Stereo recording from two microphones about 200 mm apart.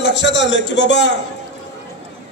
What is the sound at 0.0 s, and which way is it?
A man's voice, 60° left (ahead or behind).